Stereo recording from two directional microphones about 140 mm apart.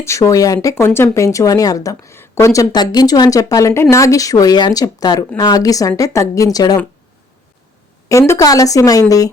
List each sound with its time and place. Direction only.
0.0 s speech: 20° left (ahead or behind)
8.3 s speech: 25° left (ahead or behind)